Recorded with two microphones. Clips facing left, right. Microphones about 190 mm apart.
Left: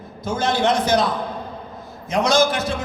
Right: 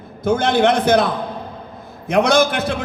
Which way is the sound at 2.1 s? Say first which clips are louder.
Right 3 dB; 60° right (ahead or behind).